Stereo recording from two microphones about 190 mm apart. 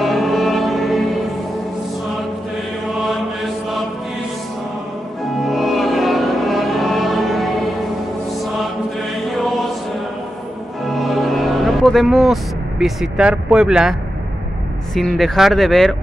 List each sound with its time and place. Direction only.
0.0 s music: centre (ahead or behind)
5.4 s music: centre (ahead or behind)
9.3 s chant: centre (ahead or behind)
10.9 s music: centre (ahead or behind)
15.0 s speech: centre (ahead or behind)